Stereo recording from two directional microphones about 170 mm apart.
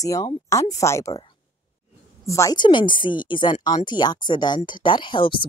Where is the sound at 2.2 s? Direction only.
20° left (ahead or behind).